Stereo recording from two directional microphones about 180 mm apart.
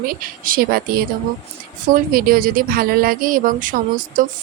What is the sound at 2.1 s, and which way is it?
Speech, 55° right (ahead or behind).